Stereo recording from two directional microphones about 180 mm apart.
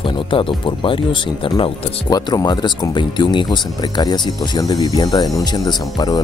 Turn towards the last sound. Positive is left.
turn(degrees=20)  # may be behind; listen again after turning